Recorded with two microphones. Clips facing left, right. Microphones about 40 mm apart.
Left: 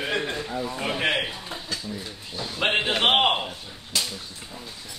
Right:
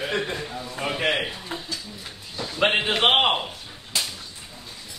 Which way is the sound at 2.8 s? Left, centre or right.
Centre.